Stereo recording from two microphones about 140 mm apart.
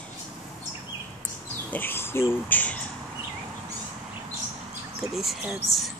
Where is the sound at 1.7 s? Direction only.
15° left (ahead or behind).